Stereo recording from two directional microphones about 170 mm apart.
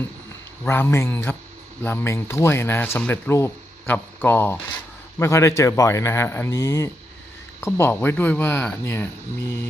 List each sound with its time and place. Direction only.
0.6 s speech: 15° left (ahead or behind)